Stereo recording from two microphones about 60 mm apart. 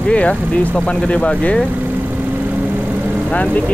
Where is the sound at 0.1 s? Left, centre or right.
Left.